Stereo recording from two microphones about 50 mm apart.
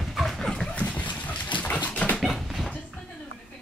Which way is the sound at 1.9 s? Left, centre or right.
Left.